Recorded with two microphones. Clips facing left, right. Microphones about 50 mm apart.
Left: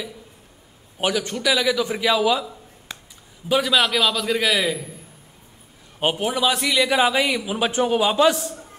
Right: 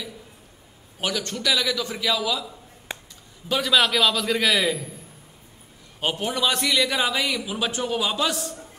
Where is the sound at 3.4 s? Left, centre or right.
Centre.